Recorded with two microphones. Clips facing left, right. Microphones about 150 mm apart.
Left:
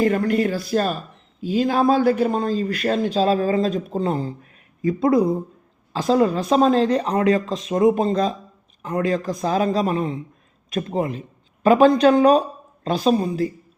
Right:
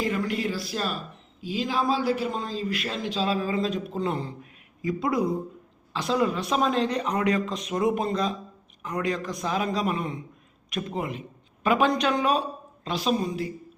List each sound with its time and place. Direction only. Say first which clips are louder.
0.0 s a man's voice: left 8 dB; 50° left (ahead or behind)